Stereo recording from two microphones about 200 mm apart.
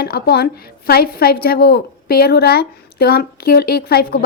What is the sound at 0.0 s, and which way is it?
A woman's voice, 50° left (ahead or behind).